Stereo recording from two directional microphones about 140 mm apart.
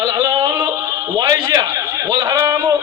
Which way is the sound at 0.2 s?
25° right (ahead or behind).